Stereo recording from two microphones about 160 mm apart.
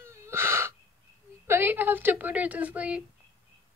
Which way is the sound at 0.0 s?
15° right (ahead or behind).